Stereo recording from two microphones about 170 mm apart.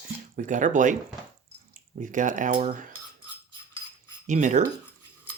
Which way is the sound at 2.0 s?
50° right (ahead or behind).